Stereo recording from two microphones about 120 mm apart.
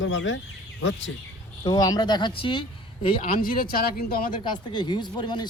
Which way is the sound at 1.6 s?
30° left (ahead or behind).